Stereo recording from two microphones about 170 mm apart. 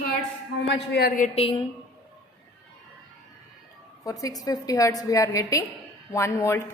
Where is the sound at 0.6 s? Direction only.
85° left.